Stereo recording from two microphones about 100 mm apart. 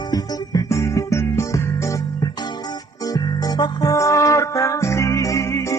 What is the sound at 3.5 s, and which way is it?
Music, 40° left (ahead or behind).